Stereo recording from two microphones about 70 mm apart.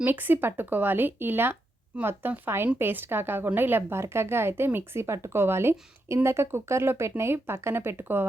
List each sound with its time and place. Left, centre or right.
0.0 s a woman's voice: right